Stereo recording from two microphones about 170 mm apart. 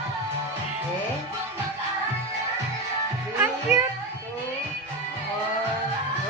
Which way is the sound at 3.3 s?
15° right (ahead or behind).